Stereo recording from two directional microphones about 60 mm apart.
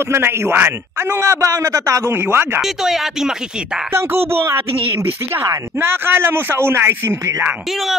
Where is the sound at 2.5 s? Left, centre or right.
Centre.